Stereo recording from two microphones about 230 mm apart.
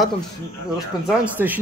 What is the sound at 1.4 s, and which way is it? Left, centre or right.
Speech, centre.